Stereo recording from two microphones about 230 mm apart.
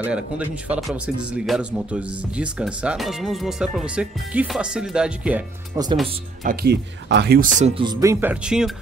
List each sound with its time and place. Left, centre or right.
0.7 s speech: centre
6.4 s speech: right; by 8.7 s centre